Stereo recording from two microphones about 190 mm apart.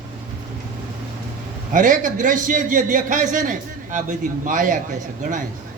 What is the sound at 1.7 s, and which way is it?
A man's voice, 45° right (ahead or behind).